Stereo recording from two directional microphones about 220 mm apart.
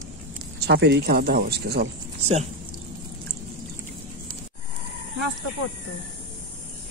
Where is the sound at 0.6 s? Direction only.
50° right (ahead or behind).